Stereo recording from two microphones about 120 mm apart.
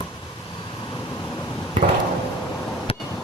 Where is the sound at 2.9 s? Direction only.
55° left (ahead or behind).